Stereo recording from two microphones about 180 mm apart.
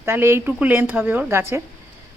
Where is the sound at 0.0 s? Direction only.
15° right (ahead or behind).